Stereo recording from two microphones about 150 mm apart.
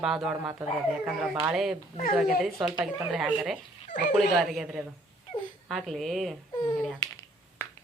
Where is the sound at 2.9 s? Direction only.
Centre (ahead or behind).